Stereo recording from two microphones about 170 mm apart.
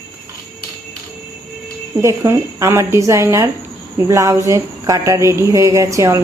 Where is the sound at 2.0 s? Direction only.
15° right (ahead or behind).